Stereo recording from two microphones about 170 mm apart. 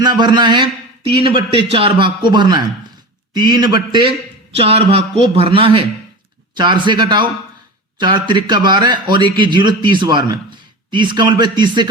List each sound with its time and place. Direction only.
0.0 s a man's voice: 25° right (ahead or behind)